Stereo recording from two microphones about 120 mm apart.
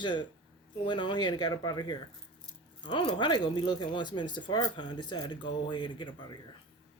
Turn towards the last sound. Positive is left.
turn(degrees=40)  # may be behind; listen again after turning